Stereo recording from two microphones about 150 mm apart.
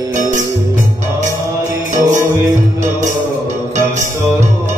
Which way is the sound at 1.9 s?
55° right (ahead or behind).